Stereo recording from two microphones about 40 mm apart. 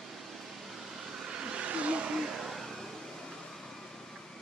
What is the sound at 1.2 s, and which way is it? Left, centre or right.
Vehicle, right.